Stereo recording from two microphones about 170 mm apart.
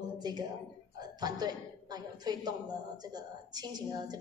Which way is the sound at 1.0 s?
25° right (ahead or behind).